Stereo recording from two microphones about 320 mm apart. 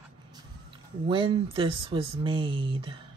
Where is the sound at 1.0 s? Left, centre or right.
Centre.